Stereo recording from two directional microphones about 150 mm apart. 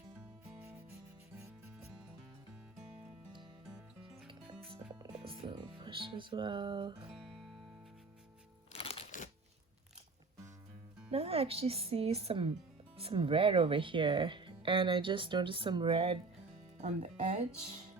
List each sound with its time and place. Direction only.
4.3 s music: 35° right (ahead or behind)
5.2 s speech: 35° right (ahead or behind)
7.1 s guitar: centre (ahead or behind)
8.8 s music: 40° left (ahead or behind)
11.1 s speech: 40° right (ahead or behind)
16.8 s speech: 55° right (ahead or behind)